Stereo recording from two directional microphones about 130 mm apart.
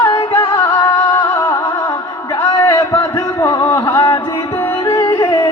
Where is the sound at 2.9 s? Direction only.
20° left (ahead or behind).